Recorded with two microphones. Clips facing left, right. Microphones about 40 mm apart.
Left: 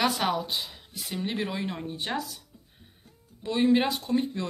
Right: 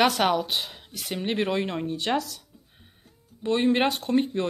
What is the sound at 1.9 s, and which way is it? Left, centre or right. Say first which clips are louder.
Speech: right 5 dB; right.